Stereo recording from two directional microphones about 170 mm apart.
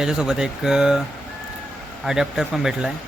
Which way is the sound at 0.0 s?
5° right (ahead or behind).